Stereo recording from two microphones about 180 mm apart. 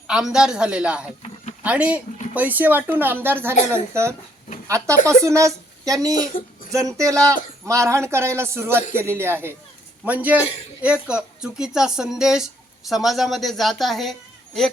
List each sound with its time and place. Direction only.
0.1 s a man's voice: 5° right (ahead or behind)
5.2 s speech: 15° right (ahead or behind)
6.3 s speech: 50° left (ahead or behind)
6.7 s a man's voice: 20° right (ahead or behind); by 14.7 s centre (ahead or behind)